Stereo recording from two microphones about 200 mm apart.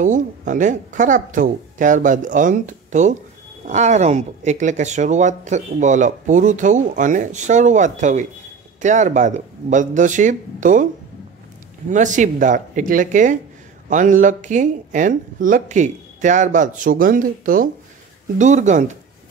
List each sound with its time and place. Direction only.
0.0 s speech: 40° right (ahead or behind)
11.9 s speech: 40° right (ahead or behind)